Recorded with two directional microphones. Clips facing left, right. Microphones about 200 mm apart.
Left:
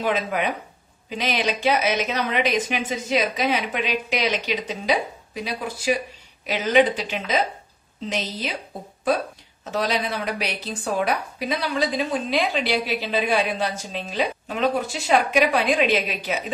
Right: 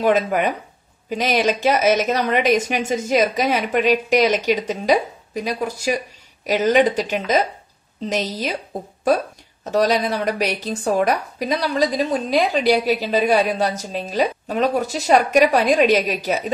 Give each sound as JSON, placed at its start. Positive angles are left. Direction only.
{"t": 0.0, "sound": "speech", "side_deg": -45}
{"t": 9.7, "sound": "a woman's voice", "side_deg": -40}